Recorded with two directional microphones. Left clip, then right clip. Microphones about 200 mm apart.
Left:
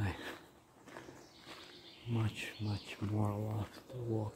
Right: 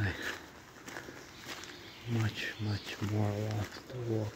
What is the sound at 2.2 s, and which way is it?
Speech, 5° left (ahead or behind).